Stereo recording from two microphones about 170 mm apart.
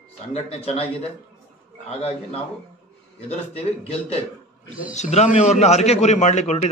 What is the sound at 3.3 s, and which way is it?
A man's voice, 35° left (ahead or behind).